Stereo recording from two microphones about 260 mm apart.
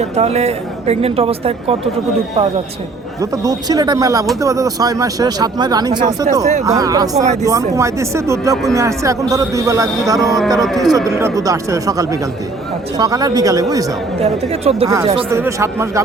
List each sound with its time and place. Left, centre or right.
0.0 s speech: right
3.2 s speech: centre
10.2 s speech: centre
11.1 s speech: centre
15.3 s speech: centre